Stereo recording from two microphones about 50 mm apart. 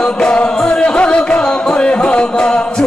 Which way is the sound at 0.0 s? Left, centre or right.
Centre.